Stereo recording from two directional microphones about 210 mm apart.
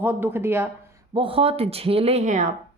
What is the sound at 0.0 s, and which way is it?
Speech, 10° right (ahead or behind).